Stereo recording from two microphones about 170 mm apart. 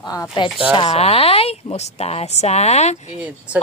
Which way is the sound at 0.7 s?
35° left (ahead or behind).